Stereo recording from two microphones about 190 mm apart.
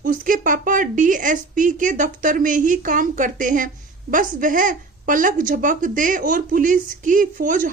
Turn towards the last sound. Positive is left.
turn(degrees=-45)  # may be behind; listen again after turning